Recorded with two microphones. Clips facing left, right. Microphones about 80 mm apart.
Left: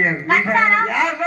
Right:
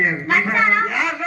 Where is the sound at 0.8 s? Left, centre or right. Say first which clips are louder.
Left 3 dB; left.